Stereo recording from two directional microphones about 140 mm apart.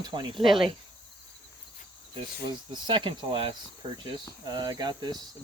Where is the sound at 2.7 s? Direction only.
35° right (ahead or behind).